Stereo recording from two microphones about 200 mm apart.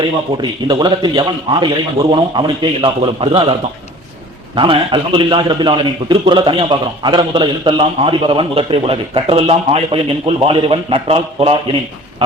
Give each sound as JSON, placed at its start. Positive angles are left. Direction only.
{"t": 0.7, "sound": "a man's voice", "side_deg": -20}